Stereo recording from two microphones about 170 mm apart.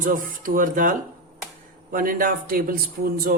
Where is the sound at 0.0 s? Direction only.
55° right (ahead or behind).